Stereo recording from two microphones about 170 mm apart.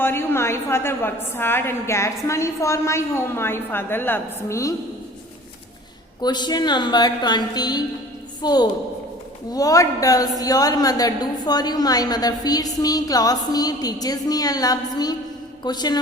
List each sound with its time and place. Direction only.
0.0 s a woman's voice: 15° left (ahead or behind)
6.2 s a woman's voice: 25° left (ahead or behind)